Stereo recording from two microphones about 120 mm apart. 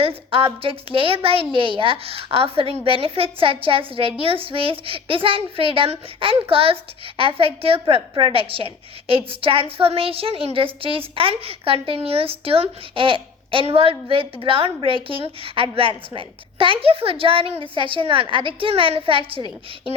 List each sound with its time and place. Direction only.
0.3 s a woman's voice: 50° right (ahead or behind)